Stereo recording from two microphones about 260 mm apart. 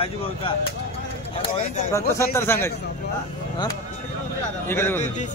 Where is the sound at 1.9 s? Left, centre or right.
Centre.